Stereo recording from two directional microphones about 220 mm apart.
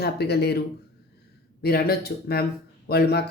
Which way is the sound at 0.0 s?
45° left (ahead or behind).